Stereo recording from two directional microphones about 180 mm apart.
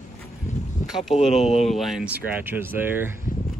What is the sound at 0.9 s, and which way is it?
Speech, centre (ahead or behind).